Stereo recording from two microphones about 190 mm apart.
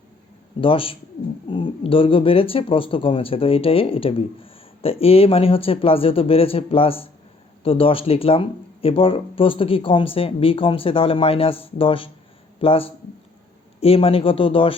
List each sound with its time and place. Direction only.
0.6 s speech: 30° left (ahead or behind)